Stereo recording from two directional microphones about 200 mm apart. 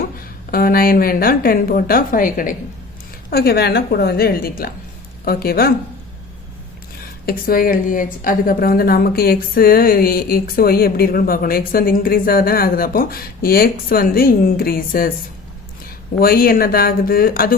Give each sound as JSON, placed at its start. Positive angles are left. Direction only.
{"t": 0.2, "sound": "a woman's voice", "side_deg": 45}
{"t": 7.0, "sound": "a woman's voice", "side_deg": 50}
{"t": 16.2, "sound": "a woman's voice", "side_deg": 45}